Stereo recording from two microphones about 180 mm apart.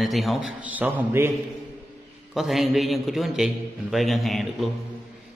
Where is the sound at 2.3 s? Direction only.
Centre (ahead or behind).